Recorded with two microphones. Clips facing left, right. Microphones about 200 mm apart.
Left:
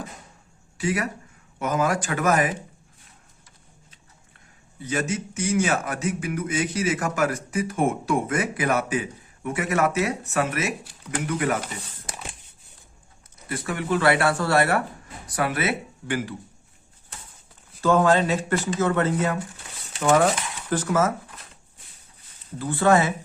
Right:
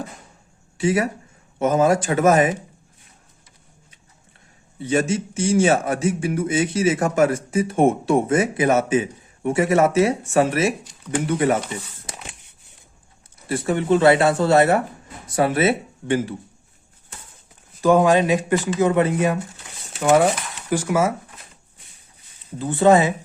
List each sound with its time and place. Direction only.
0.8 s a man's voice: 25° right (ahead or behind)
4.8 s a man's voice: 25° right (ahead or behind)
13.5 s a man's voice: 25° right (ahead or behind)
17.7 s speech: 15° right (ahead or behind)
22.5 s a man's voice: 20° right (ahead or behind)